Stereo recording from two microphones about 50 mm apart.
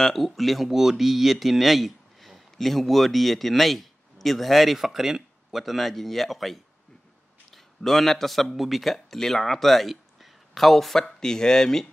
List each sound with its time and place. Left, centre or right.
0.0 s a man's voice: centre